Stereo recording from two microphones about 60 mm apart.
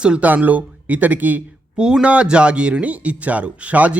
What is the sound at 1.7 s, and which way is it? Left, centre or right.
Speech, centre.